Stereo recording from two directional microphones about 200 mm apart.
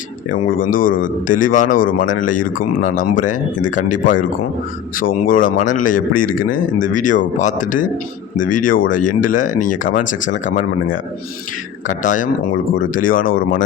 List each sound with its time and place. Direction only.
0.5 s a man's voice: 45° left (ahead or behind)